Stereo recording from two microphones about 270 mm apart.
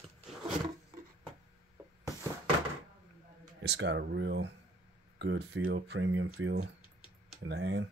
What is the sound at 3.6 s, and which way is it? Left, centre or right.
Speech, right.